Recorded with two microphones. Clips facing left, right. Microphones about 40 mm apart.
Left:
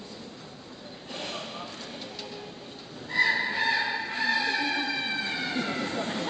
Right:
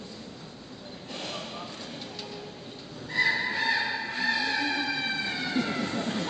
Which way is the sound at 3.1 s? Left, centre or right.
Centre.